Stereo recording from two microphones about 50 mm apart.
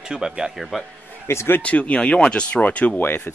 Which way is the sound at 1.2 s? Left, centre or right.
Left.